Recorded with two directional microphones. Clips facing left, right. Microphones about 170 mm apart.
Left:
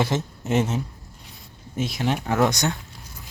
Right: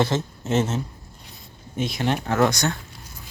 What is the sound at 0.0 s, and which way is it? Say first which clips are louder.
Speech: right 1 dB; 15° left (ahead or behind).